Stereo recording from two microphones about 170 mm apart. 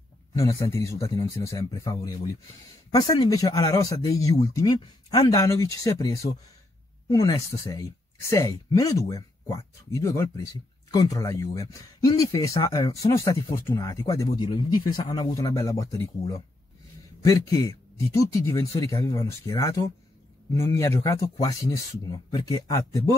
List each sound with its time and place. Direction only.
0.3 s a man's voice: 20° left (ahead or behind)
7.3 s speech: 20° left (ahead or behind)